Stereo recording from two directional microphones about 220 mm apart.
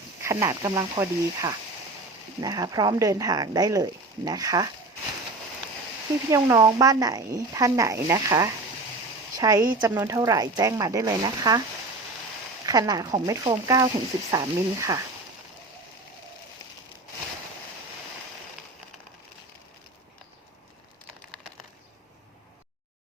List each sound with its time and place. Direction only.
0.2 s speech: 15° right (ahead or behind)
6.3 s speech: 15° right (ahead or behind)
12.6 s speech: 15° right (ahead or behind)